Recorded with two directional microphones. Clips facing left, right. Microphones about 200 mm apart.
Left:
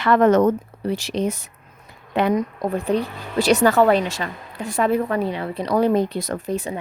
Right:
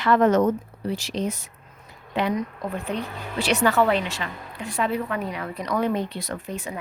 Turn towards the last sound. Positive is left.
turn(degrees=35)  # may be behind; listen again after turning